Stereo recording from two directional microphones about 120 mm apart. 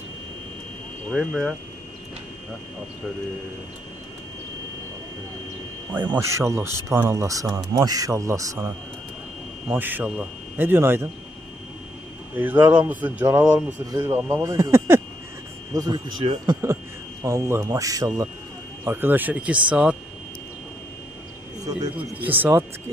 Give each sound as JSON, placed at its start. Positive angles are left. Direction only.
{"t": 1.1, "sound": "speech", "side_deg": 0}
{"t": 6.1, "sound": "speech", "side_deg": -25}
{"t": 12.4, "sound": "speech", "side_deg": -15}
{"t": 13.9, "sound": "speech", "side_deg": -20}
{"t": 15.7, "sound": "speech", "side_deg": -35}
{"t": 17.2, "sound": "speech", "side_deg": -25}
{"t": 18.9, "sound": "speech", "side_deg": -15}
{"t": 21.9, "sound": "speech", "side_deg": -15}